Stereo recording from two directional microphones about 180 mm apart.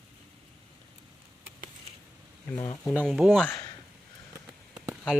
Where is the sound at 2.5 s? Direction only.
25° left (ahead or behind).